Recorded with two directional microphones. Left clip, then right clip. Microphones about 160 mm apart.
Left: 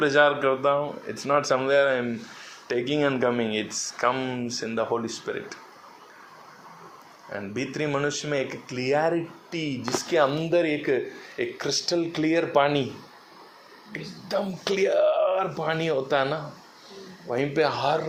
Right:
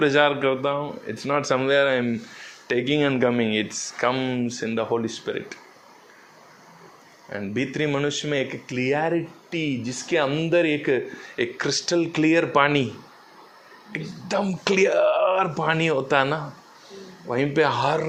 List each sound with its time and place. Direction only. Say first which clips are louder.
0.0 s speech: right 1 dB; 55° right (ahead or behind)
7.3 s speech: right 3 dB; 60° right (ahead or behind)
13.9 s speech: right 3 dB; 45° right (ahead or behind)